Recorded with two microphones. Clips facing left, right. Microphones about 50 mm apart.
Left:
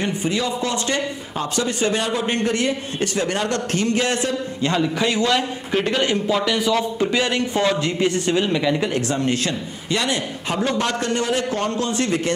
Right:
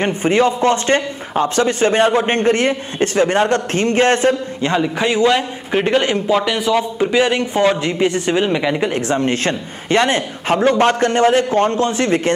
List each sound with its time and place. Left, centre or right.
0.0 s speech: right
4.6 s a man's voice: right